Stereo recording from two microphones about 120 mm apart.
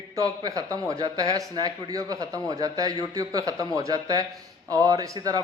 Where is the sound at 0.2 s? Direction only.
30° right (ahead or behind).